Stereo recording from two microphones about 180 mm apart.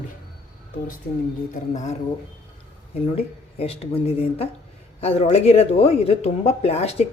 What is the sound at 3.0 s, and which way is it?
Speech, 30° left (ahead or behind).